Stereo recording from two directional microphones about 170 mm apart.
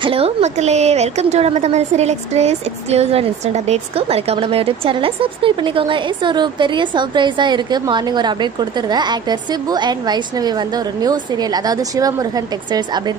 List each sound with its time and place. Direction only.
0.0 s a woman's voice: 35° right (ahead or behind)